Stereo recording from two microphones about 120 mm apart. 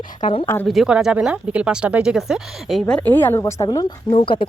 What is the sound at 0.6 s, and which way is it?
Speech, 5° right (ahead or behind).